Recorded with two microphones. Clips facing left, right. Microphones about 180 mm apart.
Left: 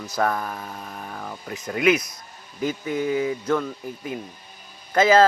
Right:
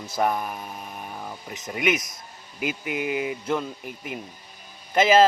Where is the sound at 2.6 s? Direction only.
15° right (ahead or behind).